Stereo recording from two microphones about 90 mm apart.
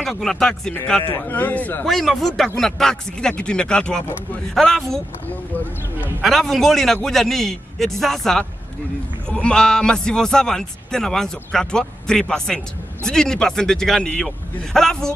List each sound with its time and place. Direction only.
0.0 s a man's voice: 5° left (ahead or behind)
1.0 s a man's voice: 25° left (ahead or behind)
1.9 s a man's voice: centre (ahead or behind)
6.2 s a man's voice: centre (ahead or behind)